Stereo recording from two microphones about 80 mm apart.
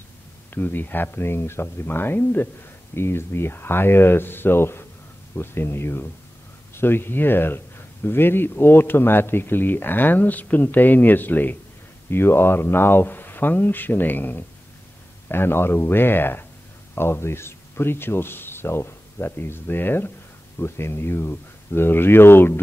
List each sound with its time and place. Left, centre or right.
0.6 s speech: left